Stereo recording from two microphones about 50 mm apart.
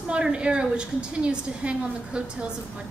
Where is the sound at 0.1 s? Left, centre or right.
Right.